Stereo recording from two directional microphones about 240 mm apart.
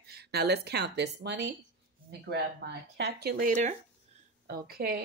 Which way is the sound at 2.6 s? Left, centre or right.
Right.